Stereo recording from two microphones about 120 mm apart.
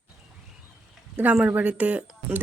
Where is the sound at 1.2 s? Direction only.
10° right (ahead or behind).